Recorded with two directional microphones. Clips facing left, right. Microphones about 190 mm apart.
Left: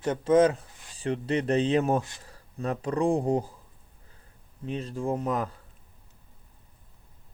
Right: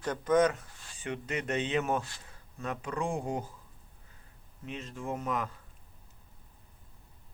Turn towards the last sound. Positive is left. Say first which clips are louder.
# left 6 dB
turn(degrees=35)  # may be behind; listen again after turning